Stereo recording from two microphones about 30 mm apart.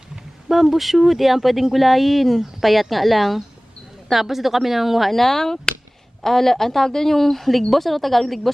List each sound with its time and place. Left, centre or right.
0.4 s a woman's voice: centre
5.2 s a woman's voice: centre